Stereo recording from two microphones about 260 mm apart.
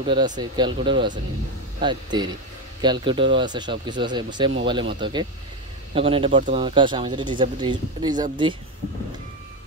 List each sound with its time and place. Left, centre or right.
0.0 s speech: centre